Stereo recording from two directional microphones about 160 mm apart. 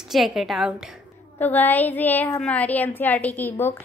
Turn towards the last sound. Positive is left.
turn(degrees=10)  # may be behind; listen again after turning